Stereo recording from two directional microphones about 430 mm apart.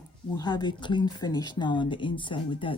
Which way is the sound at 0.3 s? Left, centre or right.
Centre.